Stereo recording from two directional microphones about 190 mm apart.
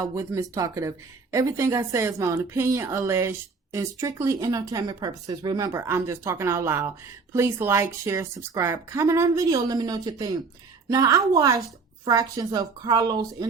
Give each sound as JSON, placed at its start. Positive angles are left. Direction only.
{"t": 0.0, "sound": "a woman's voice", "side_deg": -15}